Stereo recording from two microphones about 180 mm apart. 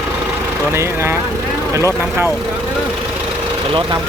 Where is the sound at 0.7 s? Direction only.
15° right (ahead or behind).